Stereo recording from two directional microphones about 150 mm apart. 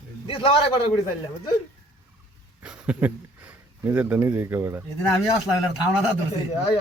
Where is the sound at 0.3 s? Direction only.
35° left (ahead or behind).